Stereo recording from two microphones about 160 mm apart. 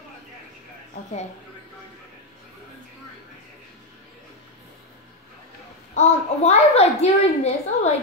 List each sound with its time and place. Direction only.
5.9 s a child's voice: 45° left (ahead or behind)